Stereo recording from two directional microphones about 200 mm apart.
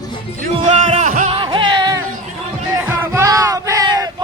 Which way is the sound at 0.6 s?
30° right (ahead or behind).